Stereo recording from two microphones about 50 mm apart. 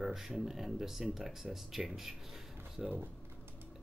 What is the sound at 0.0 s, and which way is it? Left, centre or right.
Speech, centre.